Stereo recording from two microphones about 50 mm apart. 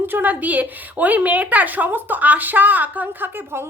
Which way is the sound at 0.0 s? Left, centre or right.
Right.